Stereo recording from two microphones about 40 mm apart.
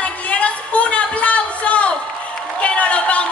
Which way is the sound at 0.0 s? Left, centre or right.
Left.